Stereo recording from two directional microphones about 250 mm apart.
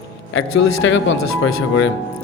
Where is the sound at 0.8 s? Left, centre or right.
Left.